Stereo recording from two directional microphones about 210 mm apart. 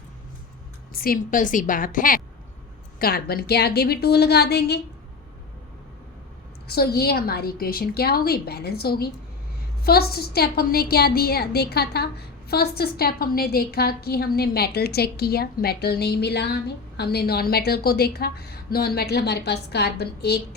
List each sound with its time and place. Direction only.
0.9 s a woman's voice: 45° left (ahead or behind)
6.7 s a woman's voice: 50° left (ahead or behind)